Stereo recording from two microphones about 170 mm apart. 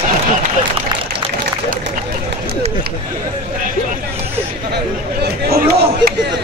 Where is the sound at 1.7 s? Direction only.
85° right.